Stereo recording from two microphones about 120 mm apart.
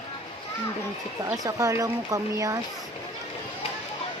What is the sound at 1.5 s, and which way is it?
Speech, 25° right (ahead or behind).